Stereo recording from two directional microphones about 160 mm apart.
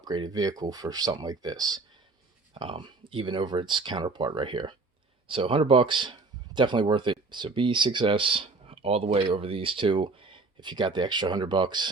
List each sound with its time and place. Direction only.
0.0 s speech: 25° right (ahead or behind)